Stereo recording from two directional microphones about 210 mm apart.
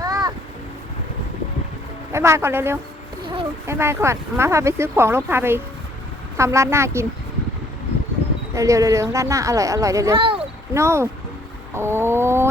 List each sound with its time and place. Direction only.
0.0 s a sound: 20° right (ahead or behind)
2.1 s speech: 10° right (ahead or behind)
8.5 s speech: 15° right (ahead or behind)
10.8 s speech: 15° right (ahead or behind)